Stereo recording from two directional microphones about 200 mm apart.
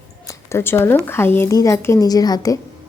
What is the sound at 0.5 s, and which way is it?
A woman's voice, 10° left (ahead or behind).